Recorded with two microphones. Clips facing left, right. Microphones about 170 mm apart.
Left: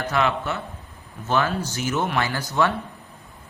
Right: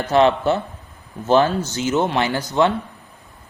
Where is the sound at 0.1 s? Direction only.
30° right (ahead or behind).